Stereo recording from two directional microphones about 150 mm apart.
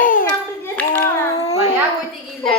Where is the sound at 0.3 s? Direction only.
10° left (ahead or behind).